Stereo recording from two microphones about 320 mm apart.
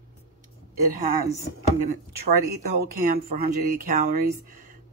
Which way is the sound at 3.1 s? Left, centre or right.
Right.